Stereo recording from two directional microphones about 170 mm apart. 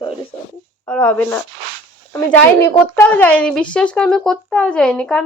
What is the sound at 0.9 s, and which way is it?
Speech, 5° left (ahead or behind).